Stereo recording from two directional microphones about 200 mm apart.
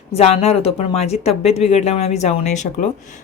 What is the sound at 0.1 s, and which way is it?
Speech, 30° left (ahead or behind).